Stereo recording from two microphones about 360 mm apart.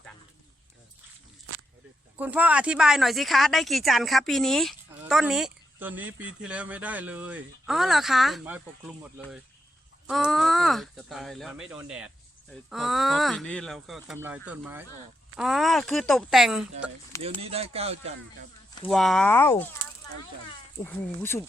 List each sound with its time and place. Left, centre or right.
2.1 s speech: centre
17.4 s speech: centre
18.9 s speech: centre
20.8 s speech: centre